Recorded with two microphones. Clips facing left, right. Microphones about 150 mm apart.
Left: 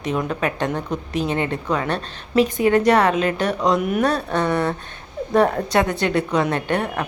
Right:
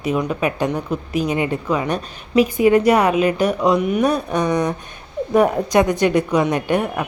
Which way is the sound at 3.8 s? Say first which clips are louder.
Right 2 dB; centre (ahead or behind).